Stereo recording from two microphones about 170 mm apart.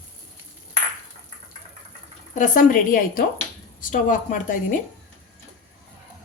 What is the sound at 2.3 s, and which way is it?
A woman's voice, 50° left (ahead or behind).